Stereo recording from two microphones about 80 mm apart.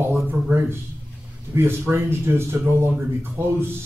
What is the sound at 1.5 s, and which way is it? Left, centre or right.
Speech, right.